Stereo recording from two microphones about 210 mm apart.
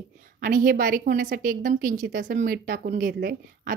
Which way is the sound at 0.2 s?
40° right (ahead or behind).